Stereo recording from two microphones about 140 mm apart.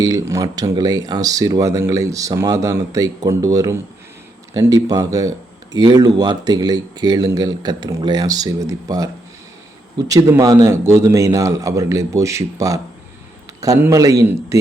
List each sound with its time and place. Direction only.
0.0 s speech: 25° right (ahead or behind)
10.1 s speech: 25° right (ahead or behind)